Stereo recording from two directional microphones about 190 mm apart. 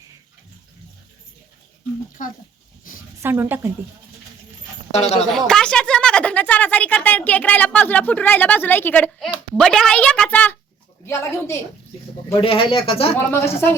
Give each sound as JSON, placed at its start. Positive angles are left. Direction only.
{"t": 2.2, "sound": "speech", "side_deg": 45}
{"t": 3.2, "sound": "a woman's voice", "side_deg": -10}
{"t": 4.9, "sound": "speech", "side_deg": 35}
{"t": 5.5, "sound": "a woman's voice", "side_deg": 5}
{"t": 12.4, "sound": "speech", "side_deg": 25}
{"t": 13.1, "sound": "speech", "side_deg": 15}